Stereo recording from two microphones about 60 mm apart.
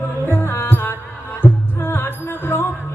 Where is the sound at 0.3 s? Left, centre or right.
Left.